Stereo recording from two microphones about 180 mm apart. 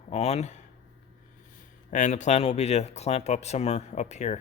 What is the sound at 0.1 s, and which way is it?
Speech, 35° left (ahead or behind).